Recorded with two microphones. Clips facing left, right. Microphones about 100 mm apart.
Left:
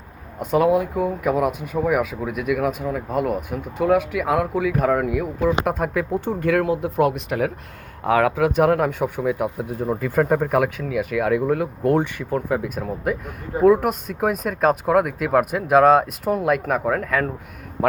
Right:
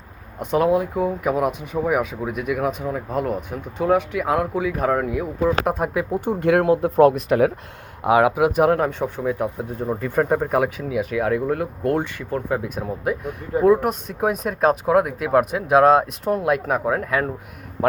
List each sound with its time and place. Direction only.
0.3 s speech: centre (ahead or behind)
6.4 s speech: 30° right (ahead or behind)
8.0 s speech: 15° right (ahead or behind)
16.9 s speech: 10° right (ahead or behind)